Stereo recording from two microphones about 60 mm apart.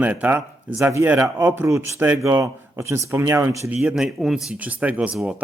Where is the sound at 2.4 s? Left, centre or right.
Right.